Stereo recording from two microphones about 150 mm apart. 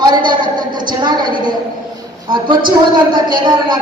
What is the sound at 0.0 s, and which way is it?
A woman's voice, 30° right (ahead or behind).